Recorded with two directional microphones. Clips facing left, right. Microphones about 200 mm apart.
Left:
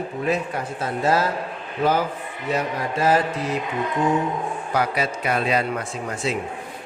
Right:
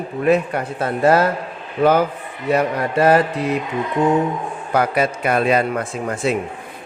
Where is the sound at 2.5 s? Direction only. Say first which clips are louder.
Right 7 dB; 60° right (ahead or behind).